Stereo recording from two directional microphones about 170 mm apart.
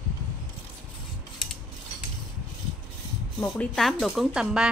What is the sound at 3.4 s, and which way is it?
Speech, 5° left (ahead or behind).